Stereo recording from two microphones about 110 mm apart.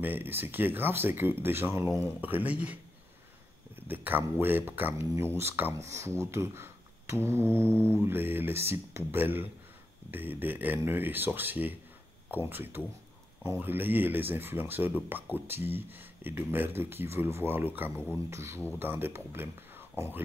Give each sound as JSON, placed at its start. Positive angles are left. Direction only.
{"t": 0.0, "sound": "speech", "side_deg": -15}
{"t": 3.8, "sound": "speech", "side_deg": -15}